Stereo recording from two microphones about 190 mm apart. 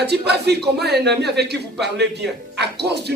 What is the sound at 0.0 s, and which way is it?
Speech, 60° right (ahead or behind).